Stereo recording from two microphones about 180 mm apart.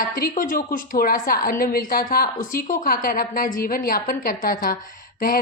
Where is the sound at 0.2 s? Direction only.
55° left (ahead or behind).